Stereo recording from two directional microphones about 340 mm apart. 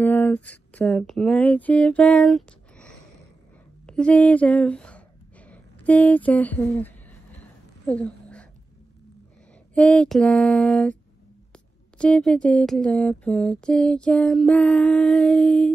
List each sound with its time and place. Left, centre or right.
0.0 s speech: centre
7.8 s a sound: centre
9.8 s speech: centre